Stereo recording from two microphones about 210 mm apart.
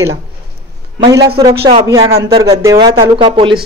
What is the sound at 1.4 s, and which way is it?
Speech, 20° right (ahead or behind).